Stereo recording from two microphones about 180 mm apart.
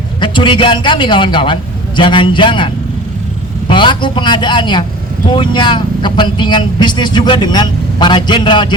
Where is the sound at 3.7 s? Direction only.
25° left (ahead or behind).